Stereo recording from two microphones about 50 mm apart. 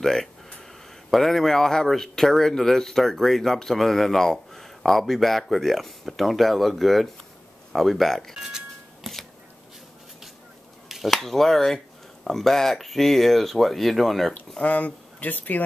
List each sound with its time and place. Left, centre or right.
0.0 s a sound: centre
1.1 s speech: centre
8.4 s music: centre
10.9 s speech: centre
14.6 s speech: left